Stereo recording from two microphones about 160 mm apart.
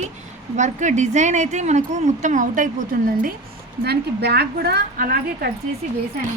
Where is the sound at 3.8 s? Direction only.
90° right; by 5.5 s 65° right (ahead or behind).